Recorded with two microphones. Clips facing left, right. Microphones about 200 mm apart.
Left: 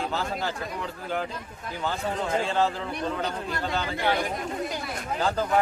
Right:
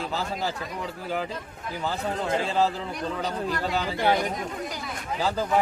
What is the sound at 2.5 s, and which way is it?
Speech, 5° right (ahead or behind).